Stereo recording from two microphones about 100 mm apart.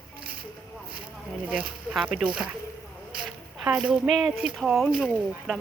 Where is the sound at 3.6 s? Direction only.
5° right (ahead or behind).